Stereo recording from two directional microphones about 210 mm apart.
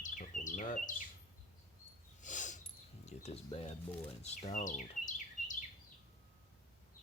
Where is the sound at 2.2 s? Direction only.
35° left (ahead or behind).